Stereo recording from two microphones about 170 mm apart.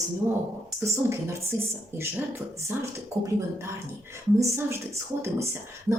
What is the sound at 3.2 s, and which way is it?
Speech, 20° right (ahead or behind).